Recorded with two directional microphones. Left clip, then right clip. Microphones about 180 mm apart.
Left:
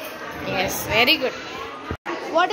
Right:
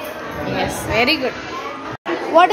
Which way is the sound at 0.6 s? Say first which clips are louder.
Right 1 dB; 5° right (ahead or behind).